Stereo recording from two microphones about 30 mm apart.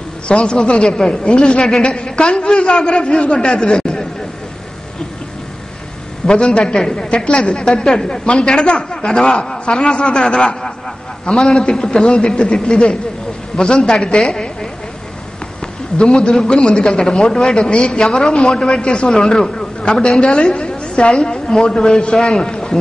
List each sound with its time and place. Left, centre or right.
0.3 s a woman's voice: left
6.2 s a woman's voice: left
8.3 s a woman's voice: left
14.2 s a sound: left
16.0 s a woman's voice: left; by 17.6 s centre
17.6 s a woman's voice: left
19.5 s a sound: left
20.2 s a woman's voice: left